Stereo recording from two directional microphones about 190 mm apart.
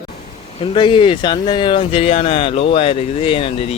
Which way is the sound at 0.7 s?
25° left (ahead or behind).